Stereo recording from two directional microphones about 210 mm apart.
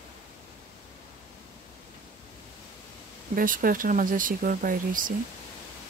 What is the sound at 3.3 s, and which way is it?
Speech, 40° right (ahead or behind).